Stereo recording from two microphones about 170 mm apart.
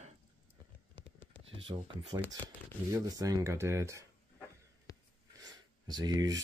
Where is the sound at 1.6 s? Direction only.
30° right (ahead or behind).